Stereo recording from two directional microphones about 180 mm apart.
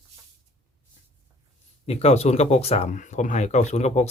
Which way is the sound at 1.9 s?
35° left (ahead or behind).